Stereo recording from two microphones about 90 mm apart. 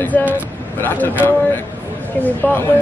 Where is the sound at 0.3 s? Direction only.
20° left (ahead or behind).